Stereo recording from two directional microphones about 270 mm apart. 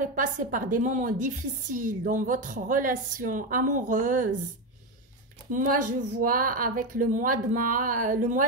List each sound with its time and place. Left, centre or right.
0.0 s a woman's voice: right
5.5 s a woman's voice: right